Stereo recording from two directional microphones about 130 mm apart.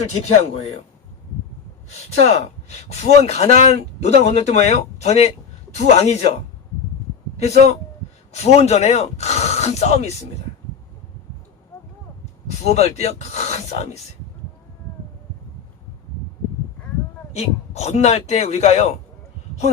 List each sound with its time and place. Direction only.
0.0 s speech: 55° left (ahead or behind)
2.2 s speech: 55° left (ahead or behind)
7.3 s a man's voice: 55° left (ahead or behind)
12.6 s speech: 55° left (ahead or behind)
17.3 s speech: 55° left (ahead or behind)